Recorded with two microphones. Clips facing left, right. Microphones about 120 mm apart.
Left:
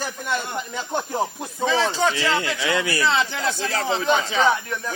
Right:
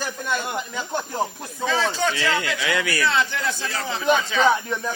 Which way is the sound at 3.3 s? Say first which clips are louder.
Left 2 dB; 90° left.